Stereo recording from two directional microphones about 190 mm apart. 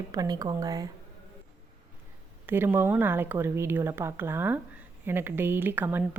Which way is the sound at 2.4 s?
10° right (ahead or behind).